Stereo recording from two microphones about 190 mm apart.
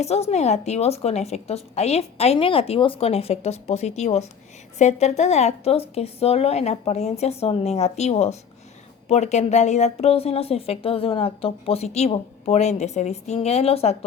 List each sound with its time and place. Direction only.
0.0 s a woman's voice: 35° left (ahead or behind)